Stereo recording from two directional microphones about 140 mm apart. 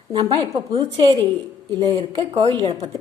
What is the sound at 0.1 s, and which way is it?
A woman's voice, 35° right (ahead or behind).